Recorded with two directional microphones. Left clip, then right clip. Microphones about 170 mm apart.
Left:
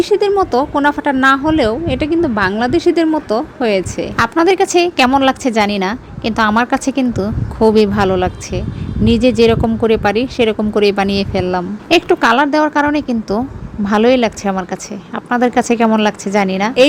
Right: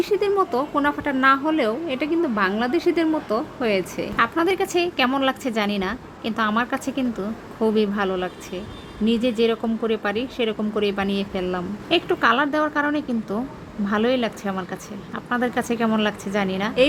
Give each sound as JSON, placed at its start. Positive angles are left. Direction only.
{"t": 0.0, "sound": "speech", "side_deg": 30}